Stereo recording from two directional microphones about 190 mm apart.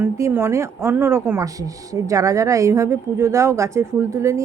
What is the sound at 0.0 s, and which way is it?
Speech, 15° right (ahead or behind).